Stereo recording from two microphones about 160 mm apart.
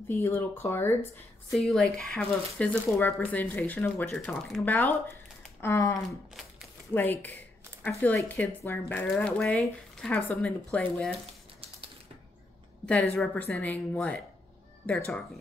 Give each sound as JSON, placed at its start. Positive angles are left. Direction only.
{"t": 0.1, "sound": "speech", "side_deg": 15}
{"t": 1.5, "sound": "speech", "side_deg": 0}
{"t": 2.9, "sound": "speech", "side_deg": 15}
{"t": 12.8, "sound": "speech", "side_deg": 5}